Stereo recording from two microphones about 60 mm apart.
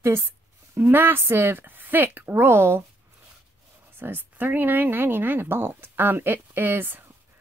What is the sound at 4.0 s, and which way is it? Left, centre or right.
Speech, right.